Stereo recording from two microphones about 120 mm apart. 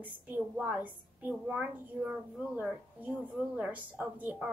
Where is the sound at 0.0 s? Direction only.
15° right (ahead or behind).